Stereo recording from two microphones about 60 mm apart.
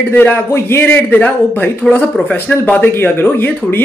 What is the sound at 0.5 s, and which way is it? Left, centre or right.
Speech, left.